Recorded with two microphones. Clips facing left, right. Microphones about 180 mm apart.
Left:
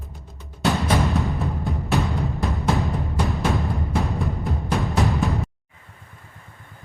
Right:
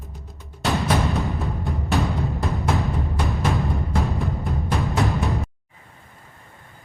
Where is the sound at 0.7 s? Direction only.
Centre (ahead or behind).